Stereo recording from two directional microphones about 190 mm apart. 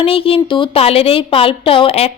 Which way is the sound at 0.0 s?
30° left (ahead or behind).